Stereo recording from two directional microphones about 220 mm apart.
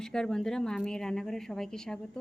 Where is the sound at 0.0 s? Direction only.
5° left (ahead or behind).